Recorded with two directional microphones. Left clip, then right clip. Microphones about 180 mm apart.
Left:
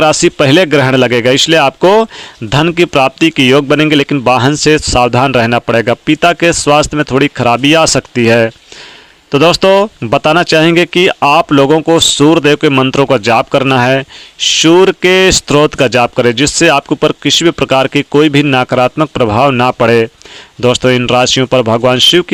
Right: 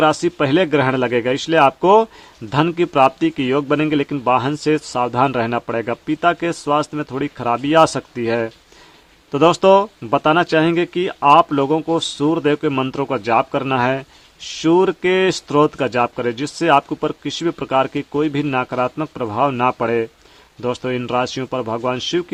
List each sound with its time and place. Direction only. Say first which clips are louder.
0.0 s speech: left 8 dB; 35° left (ahead or behind)
9.3 s speech: left 5 dB; 25° left (ahead or behind)